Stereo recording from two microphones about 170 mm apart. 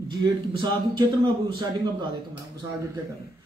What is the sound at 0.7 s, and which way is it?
A man's voice, 25° right (ahead or behind).